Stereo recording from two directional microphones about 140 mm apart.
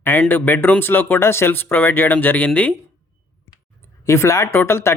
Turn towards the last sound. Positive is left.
turn(degrees=20)  # may be behind; listen again after turning